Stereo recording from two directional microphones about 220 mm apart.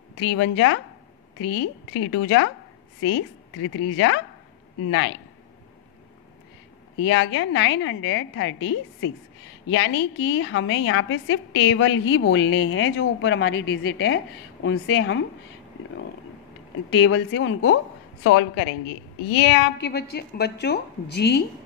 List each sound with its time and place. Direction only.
0.2 s a woman's voice: 60° left (ahead or behind)
3.0 s a woman's voice: 60° left (ahead or behind)
7.1 s a woman's voice: 60° left (ahead or behind)
17.0 s a woman's voice: 60° left (ahead or behind)
19.8 s a woman's voice: 50° left (ahead or behind)